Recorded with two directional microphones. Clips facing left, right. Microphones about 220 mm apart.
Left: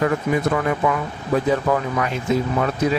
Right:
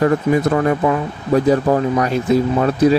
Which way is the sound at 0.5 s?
40° right (ahead or behind).